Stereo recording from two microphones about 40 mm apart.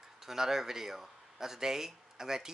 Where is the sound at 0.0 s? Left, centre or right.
Centre.